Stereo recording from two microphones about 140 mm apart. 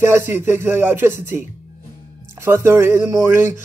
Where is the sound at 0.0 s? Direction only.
15° right (ahead or behind).